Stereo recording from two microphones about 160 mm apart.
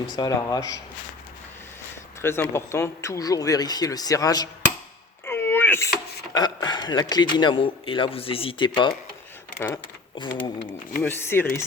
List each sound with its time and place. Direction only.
0.2 s a man's voice: 25° left (ahead or behind)
2.2 s a man's voice: 15° left (ahead or behind)
5.2 s a sound: 15° left (ahead or behind)
6.3 s a man's voice: 25° left (ahead or behind)
9.6 s speech: 10° left (ahead or behind)
10.2 s speech: 30° left (ahead or behind)
11.0 s speech: 15° left (ahead or behind)